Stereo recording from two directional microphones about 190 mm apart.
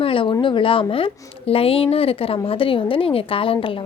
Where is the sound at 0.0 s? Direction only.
30° left (ahead or behind).